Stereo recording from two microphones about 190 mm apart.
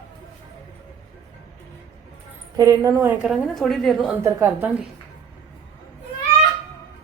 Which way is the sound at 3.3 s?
Centre (ahead or behind).